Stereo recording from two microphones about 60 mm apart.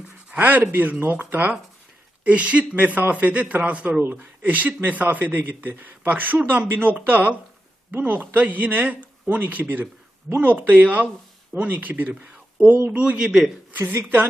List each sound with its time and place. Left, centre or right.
0.3 s a man's voice: right
13.7 s speech: right